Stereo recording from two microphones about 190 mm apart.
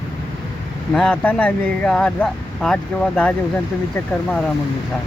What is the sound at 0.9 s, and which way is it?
Speech, 5° left (ahead or behind).